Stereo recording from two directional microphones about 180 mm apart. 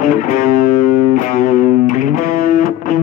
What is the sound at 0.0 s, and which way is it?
Music, 45° left (ahead or behind).